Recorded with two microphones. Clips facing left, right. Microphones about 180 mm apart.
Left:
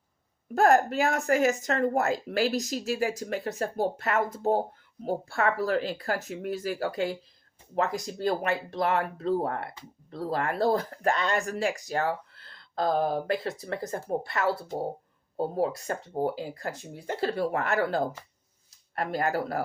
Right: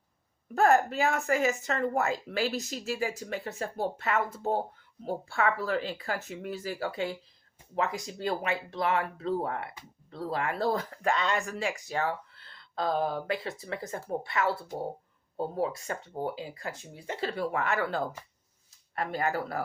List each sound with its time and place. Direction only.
0.5 s speech: 40° left (ahead or behind)